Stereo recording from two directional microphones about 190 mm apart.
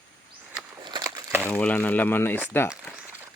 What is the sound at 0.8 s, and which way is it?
Crumpling, 20° right (ahead or behind).